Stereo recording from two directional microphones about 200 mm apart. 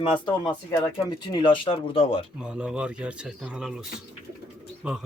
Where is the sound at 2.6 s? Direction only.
5° right (ahead or behind).